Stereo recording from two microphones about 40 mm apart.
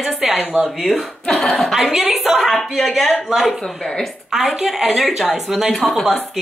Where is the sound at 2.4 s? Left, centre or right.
Centre.